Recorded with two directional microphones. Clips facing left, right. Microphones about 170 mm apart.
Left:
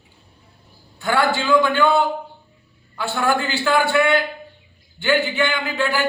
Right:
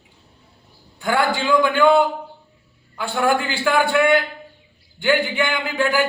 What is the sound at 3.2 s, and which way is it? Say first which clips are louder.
A man's voice: even; 15° right (ahead or behind).